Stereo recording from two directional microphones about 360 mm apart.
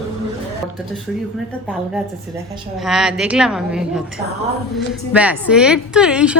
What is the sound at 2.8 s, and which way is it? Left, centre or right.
A woman's voice, centre.